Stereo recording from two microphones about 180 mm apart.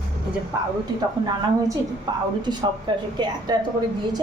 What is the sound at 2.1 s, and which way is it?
Speech, 25° right (ahead or behind).